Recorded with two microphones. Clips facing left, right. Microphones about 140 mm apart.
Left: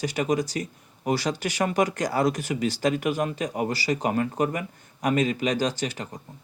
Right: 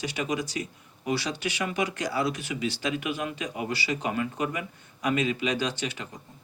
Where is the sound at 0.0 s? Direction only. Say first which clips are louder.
Left 5 dB; 45° left (ahead or behind).